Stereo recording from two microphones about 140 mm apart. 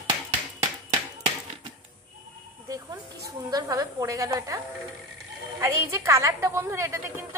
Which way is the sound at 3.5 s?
25° right (ahead or behind).